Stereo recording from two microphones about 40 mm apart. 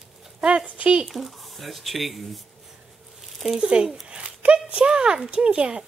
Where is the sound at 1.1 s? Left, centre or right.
Centre.